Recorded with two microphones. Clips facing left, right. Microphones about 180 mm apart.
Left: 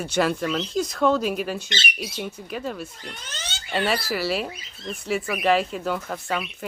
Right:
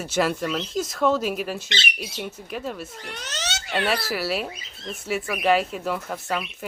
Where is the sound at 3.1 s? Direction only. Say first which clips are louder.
Right 5 dB; 75° right (ahead or behind).